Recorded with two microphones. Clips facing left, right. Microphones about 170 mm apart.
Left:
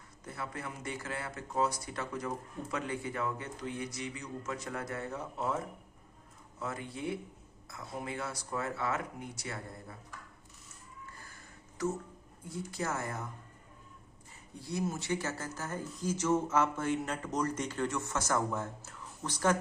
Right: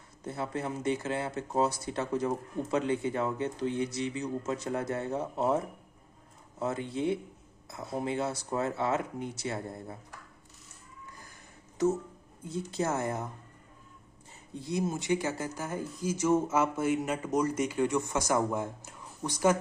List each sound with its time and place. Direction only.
0.3 s speech: 25° right (ahead or behind)
6.6 s speech: 25° right (ahead or behind)
12.7 s speech: 25° right (ahead or behind)
14.6 s speech: 20° right (ahead or behind)